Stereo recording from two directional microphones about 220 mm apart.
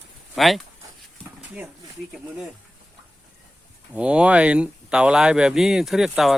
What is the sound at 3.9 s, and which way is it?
Speech, 5° right (ahead or behind).